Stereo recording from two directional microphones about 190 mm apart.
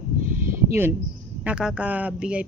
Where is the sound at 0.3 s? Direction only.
10° right (ahead or behind).